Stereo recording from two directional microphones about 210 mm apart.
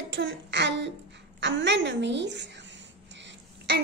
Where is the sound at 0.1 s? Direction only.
55° right (ahead or behind).